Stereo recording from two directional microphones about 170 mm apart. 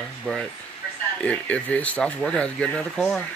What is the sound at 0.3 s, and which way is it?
Speech, 5° left (ahead or behind).